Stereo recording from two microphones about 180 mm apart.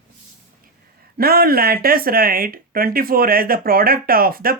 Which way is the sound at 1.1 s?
55° right (ahead or behind).